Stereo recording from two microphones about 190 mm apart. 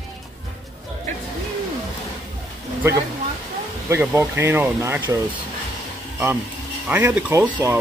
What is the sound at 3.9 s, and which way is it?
Speech, 15° right (ahead or behind).